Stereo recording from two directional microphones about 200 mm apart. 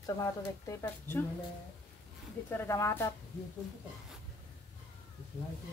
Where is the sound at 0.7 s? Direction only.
10° left (ahead or behind).